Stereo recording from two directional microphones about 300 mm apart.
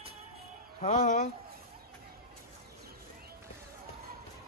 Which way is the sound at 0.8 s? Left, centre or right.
Left.